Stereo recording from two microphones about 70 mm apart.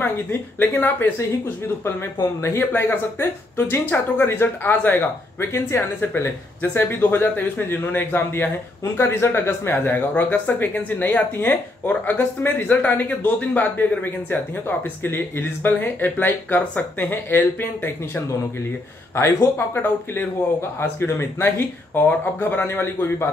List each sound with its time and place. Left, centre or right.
0.0 s speech: left
2.4 s speech: left